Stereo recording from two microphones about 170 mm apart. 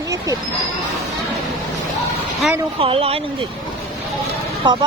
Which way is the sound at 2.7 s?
35° right (ahead or behind).